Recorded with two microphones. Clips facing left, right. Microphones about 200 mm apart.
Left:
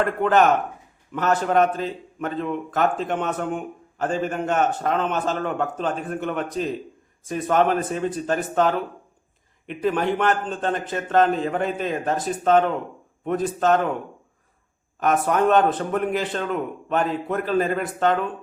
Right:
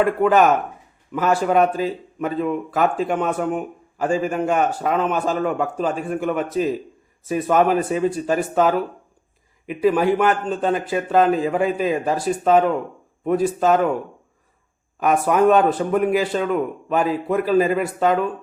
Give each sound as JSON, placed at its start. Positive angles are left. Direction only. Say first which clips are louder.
{"t": 0.0, "sound": "speech", "louder": "right 3 dB", "side_deg": -5}
{"t": 15.0, "sound": "speech", "louder": "right 3 dB", "side_deg": -5}